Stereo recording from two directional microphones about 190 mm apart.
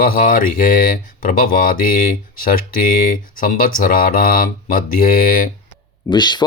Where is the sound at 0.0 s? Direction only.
45° left (ahead or behind).